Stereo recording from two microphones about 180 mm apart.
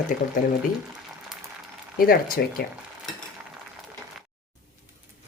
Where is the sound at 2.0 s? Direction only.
55° left (ahead or behind).